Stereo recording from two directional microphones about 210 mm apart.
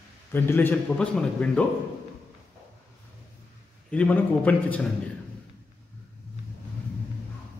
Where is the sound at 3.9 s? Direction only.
5° left (ahead or behind).